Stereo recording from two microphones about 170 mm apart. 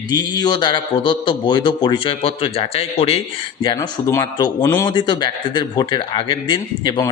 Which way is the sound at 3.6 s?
20° left (ahead or behind).